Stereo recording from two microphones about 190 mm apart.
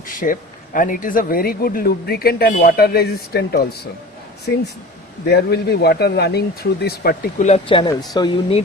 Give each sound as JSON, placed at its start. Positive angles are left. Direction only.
{"t": 0.1, "sound": "speech", "side_deg": 45}
{"t": 7.4, "sound": "speech", "side_deg": 30}